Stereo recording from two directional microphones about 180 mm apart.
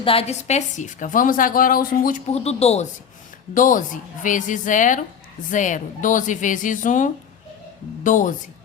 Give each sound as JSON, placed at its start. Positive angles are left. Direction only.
{"t": 0.0, "sound": "a woman's voice", "side_deg": 30}
{"t": 3.5, "sound": "a woman's voice", "side_deg": 45}